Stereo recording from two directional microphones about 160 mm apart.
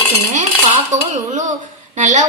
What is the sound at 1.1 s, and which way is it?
A woman's voice, 50° right (ahead or behind).